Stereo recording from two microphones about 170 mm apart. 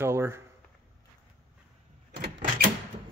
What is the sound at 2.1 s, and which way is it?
Printer, 55° right (ahead or behind).